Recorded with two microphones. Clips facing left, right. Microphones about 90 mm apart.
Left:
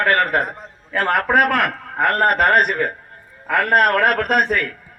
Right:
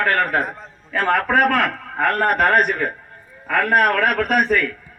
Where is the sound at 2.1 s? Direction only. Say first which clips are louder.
Left 1 dB; 65° left (ahead or behind).